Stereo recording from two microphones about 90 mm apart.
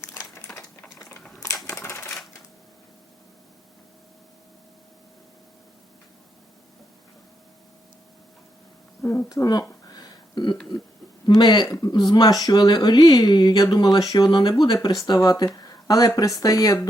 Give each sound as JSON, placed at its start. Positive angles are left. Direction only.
{"t": 0.0, "sound": "crumpling", "side_deg": 30}
{"t": 1.7, "sound": "typewriter", "side_deg": 30}
{"t": 9.3, "sound": "speech", "side_deg": 45}
{"t": 9.8, "sound": "a sound", "side_deg": 45}
{"t": 11.3, "sound": "speech", "side_deg": 55}